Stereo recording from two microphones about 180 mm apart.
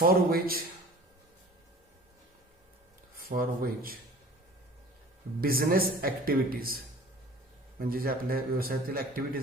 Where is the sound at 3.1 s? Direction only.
55° right (ahead or behind).